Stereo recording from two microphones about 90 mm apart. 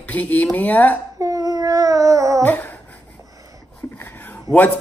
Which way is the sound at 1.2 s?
40° right (ahead or behind).